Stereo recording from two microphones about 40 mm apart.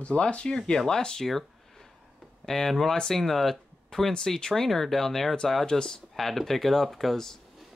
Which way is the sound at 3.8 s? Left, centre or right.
Centre.